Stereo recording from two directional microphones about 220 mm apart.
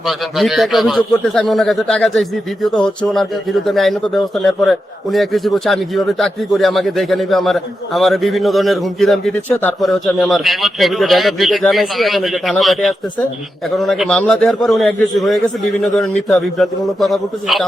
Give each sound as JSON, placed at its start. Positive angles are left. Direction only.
{"t": 0.0, "sound": "a man's voice", "side_deg": 0}